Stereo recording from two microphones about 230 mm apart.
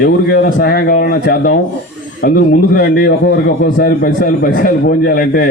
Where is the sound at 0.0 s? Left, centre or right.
Left.